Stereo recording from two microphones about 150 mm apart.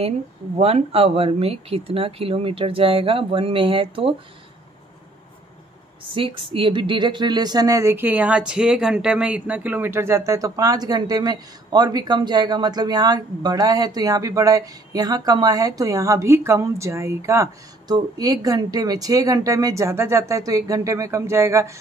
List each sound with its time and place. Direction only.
0.6 s speech: 40° right (ahead or behind)
6.0 s speech: 35° right (ahead or behind); by 21.7 s 20° right (ahead or behind)